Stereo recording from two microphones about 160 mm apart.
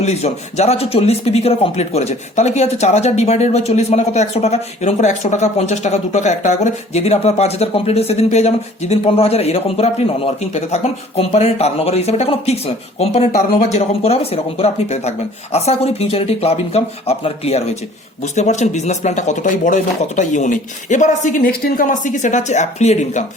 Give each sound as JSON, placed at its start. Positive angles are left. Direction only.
{"t": 0.0, "sound": "speech", "side_deg": 45}